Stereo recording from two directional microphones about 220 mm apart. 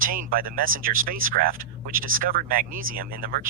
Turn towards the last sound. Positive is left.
turn(degrees=-40)  # may be behind; listen again after turning